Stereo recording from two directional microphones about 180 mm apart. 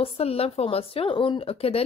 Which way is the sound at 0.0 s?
35° left (ahead or behind).